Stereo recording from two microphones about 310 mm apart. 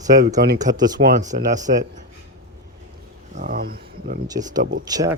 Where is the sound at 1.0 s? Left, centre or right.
Right.